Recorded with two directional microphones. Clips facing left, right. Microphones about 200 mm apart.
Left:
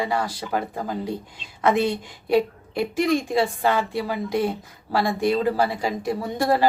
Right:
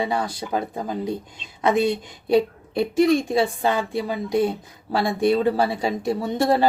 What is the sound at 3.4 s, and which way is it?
Speech, 20° right (ahead or behind).